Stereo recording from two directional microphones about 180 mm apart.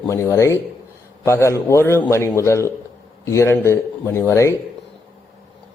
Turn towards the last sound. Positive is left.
turn(degrees=15)  # may be behind; listen again after turning